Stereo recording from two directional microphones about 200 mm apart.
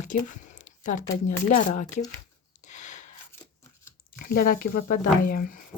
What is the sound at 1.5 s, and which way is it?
Speech, 40° left (ahead or behind).